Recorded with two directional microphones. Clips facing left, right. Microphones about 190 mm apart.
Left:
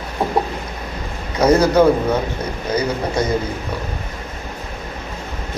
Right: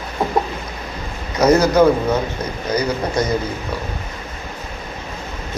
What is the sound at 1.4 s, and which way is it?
A man's voice, 30° left (ahead or behind).